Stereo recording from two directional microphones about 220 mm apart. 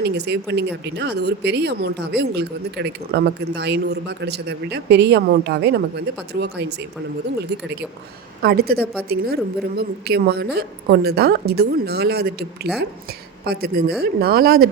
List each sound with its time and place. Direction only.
0.0 s speech: 50° right (ahead or behind)
8.4 s speech: 45° right (ahead or behind)